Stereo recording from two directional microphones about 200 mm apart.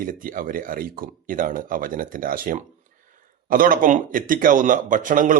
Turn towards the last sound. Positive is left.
turn(degrees=-40)  # may be behind; listen again after turning